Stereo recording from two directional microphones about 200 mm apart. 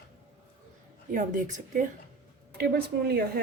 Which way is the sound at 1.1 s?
40° right (ahead or behind).